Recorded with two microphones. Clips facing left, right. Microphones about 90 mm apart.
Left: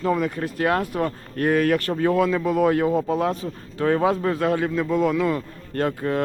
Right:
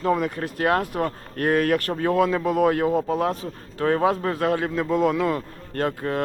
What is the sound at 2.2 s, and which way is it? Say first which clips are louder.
Speech: right 3 dB; 15° right (ahead or behind).